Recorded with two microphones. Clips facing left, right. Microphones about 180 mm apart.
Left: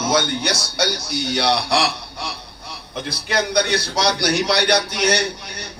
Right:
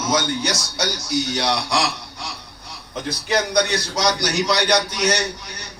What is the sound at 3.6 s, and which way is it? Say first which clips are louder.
A man's voice: left 1 dB; 60° left (ahead or behind).